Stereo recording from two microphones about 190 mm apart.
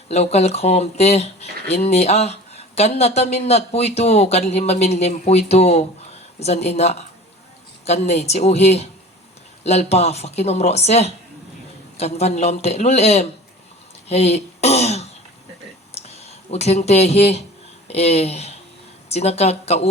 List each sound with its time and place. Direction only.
0.1 s speech: 35° left (ahead or behind)
14.1 s a sound: 35° left (ahead or behind)
16.0 s speech: 35° left (ahead or behind)